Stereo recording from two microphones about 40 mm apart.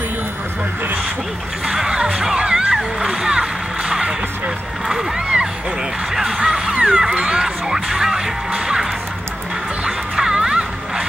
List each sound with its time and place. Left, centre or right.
1.7 s music: centre
5.1 s a sound: right
6.1 s music: centre
6.5 s a sound: right
7.0 s music: centre
9.8 s music: centre